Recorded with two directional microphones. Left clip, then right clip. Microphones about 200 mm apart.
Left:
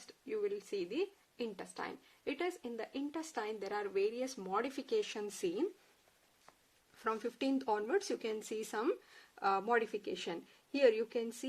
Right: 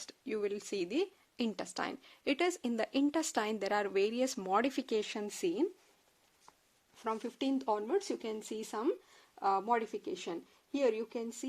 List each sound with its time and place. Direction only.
0.0 s speech: 50° right (ahead or behind); by 5.6 s 30° right (ahead or behind)
7.0 s speech: 20° right (ahead or behind)